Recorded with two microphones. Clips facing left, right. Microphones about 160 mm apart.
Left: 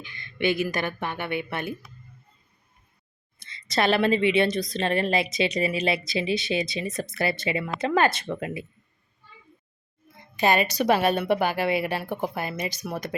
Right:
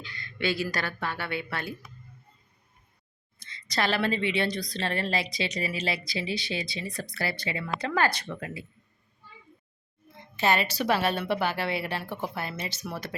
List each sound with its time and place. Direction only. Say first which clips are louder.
0.0 s a sound: left 5 dB; 20° left (ahead or behind)
0.6 s speech: left 4 dB; 20° left (ahead or behind)
3.4 s speech: left 5 dB; 20° left (ahead or behind)
10.3 s a woman's voice: left 4 dB; 15° left (ahead or behind)